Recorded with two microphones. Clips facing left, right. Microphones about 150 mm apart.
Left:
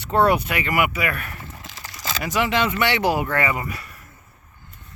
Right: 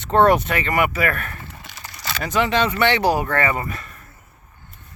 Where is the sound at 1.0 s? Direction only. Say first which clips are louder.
Right 3 dB; 45° right (ahead or behind).